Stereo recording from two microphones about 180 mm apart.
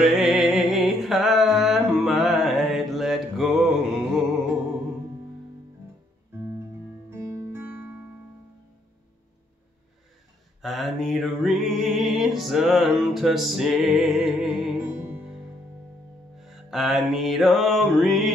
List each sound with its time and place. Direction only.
0.1 s music: centre (ahead or behind)
7.1 s music: 15° right (ahead or behind)
10.6 s music: centre (ahead or behind)
16.3 s music: centre (ahead or behind)